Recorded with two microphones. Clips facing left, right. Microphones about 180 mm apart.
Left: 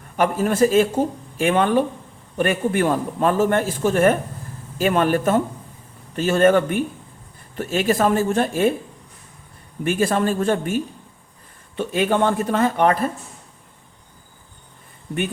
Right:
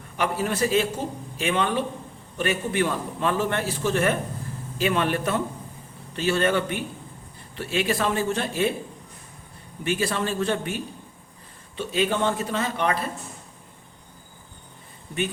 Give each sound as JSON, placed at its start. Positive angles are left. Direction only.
{"t": 0.2, "sound": "a man's voice", "side_deg": 50}
{"t": 9.8, "sound": "a man's voice", "side_deg": 50}
{"t": 11.8, "sound": "a man's voice", "side_deg": 50}